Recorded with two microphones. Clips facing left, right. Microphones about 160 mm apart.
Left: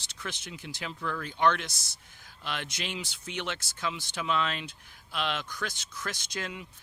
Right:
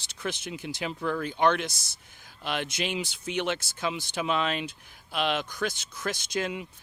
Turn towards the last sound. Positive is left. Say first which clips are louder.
# right 7 dB
turn(degrees=-15)  # may be behind; listen again after turning